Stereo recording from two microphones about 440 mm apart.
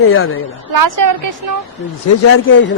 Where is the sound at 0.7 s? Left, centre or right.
Right.